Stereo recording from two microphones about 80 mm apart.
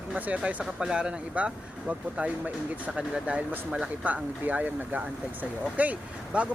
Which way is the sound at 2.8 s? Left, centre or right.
Centre.